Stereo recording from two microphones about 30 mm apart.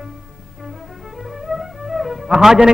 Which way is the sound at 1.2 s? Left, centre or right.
Centre.